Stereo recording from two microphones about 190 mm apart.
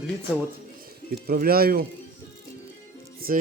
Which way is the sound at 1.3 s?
50° right (ahead or behind).